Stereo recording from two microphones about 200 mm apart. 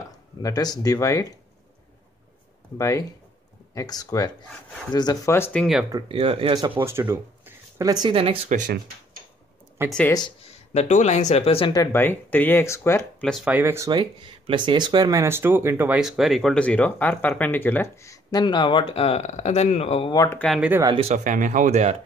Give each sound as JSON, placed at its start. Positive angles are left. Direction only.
{"t": 0.1, "sound": "speech", "side_deg": 20}
{"t": 2.8, "sound": "speech", "side_deg": 20}
{"t": 5.9, "sound": "speech", "side_deg": -25}
{"t": 9.8, "sound": "speech", "side_deg": 5}
{"t": 10.1, "sound": "speech", "side_deg": 20}
{"t": 10.7, "sound": "speech", "side_deg": 35}
{"t": 13.3, "sound": "speech", "side_deg": -5}
{"t": 20.2, "sound": "speech", "side_deg": 5}
{"t": 20.8, "sound": "speech", "side_deg": -30}